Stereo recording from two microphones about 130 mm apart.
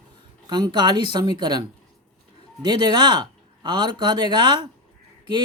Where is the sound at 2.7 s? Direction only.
35° right (ahead or behind).